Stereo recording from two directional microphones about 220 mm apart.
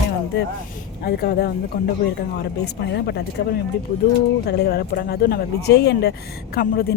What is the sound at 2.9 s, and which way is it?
Speech, 50° left (ahead or behind).